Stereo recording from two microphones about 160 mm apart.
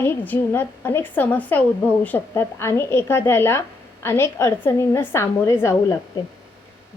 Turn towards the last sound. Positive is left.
turn(degrees=15)  # may be behind; listen again after turning